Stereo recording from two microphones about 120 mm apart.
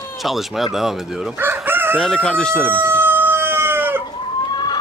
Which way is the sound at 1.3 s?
15° right (ahead or behind).